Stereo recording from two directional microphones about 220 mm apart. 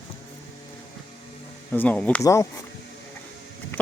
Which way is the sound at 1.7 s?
10° left (ahead or behind).